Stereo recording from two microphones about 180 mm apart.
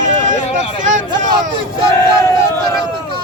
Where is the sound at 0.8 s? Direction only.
45° right (ahead or behind).